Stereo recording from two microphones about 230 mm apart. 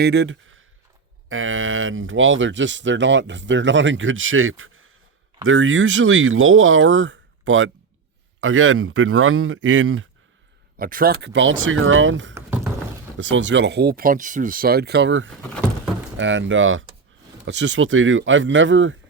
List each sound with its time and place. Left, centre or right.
0.0 s speech: right
10.8 s speech: right
12.3 s a sound: centre
13.1 s speech: right